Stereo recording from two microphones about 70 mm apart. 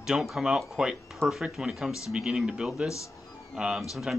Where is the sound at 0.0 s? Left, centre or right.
Centre.